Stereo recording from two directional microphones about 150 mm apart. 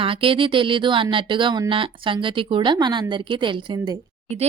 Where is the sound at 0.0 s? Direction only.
35° right (ahead or behind).